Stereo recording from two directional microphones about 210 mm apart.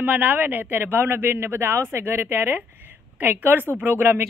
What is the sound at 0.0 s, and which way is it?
Speech, 10° right (ahead or behind).